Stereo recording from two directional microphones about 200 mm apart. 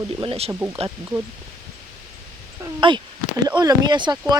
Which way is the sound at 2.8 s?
25° right (ahead or behind).